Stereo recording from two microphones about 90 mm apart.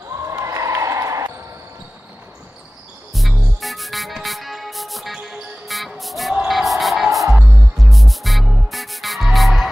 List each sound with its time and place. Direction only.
0.1 s basketball bounce: 35° right (ahead or behind)
3.1 s music: centre (ahead or behind)